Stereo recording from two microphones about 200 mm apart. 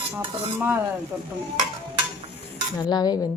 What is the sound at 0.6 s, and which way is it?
Speech, 10° right (ahead or behind).